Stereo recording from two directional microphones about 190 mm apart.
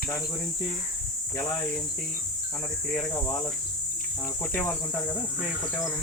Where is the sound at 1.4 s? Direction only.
10° left (ahead or behind).